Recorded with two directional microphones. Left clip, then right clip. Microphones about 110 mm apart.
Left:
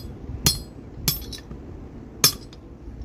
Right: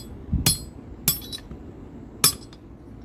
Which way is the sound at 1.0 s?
15° left (ahead or behind).